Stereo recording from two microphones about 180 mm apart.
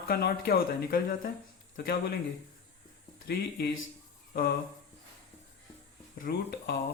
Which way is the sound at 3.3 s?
65° left (ahead or behind).